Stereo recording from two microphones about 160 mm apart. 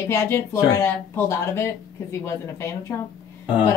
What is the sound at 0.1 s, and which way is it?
Speech, 15° left (ahead or behind).